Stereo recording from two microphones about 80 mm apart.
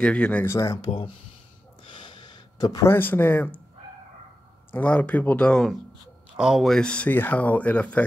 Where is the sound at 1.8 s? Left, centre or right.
Left.